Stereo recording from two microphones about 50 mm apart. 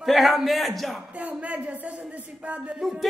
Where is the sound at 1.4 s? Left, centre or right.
Right.